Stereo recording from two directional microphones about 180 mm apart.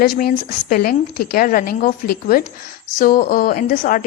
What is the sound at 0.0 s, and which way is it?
Speech, 55° left (ahead or behind).